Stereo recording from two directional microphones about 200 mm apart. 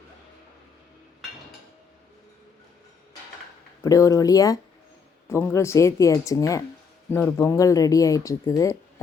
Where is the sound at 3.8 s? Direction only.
15° left (ahead or behind).